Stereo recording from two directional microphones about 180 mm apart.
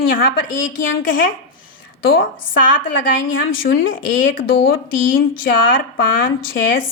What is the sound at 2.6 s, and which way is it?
Speech, 50° left (ahead or behind).